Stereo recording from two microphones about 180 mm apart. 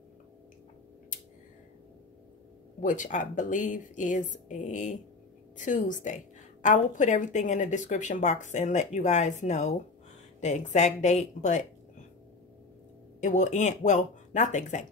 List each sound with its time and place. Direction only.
2.8 s a woman's voice: 45° left (ahead or behind)
13.2 s a woman's voice: 45° left (ahead or behind)